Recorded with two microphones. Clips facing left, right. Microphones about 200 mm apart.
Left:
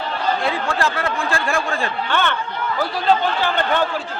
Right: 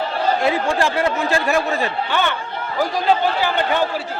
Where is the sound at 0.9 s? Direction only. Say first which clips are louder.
Right 4 dB; 20° right (ahead or behind).